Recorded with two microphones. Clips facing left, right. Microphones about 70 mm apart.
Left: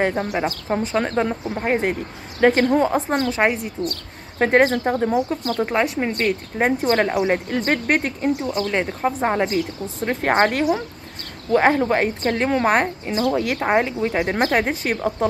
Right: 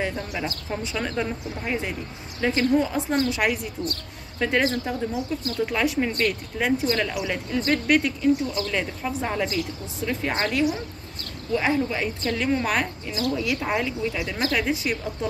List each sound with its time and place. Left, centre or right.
0.0 s speech: left
4.4 s speech: left
5.6 s speech: left
6.6 s speech: left
8.6 s speech: left
15.0 s speech: left